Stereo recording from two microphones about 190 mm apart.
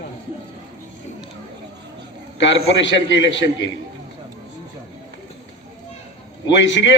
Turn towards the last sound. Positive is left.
turn(degrees=75)  # may be behind; listen again after turning